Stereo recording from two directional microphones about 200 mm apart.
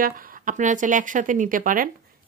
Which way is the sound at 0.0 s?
45° right (ahead or behind).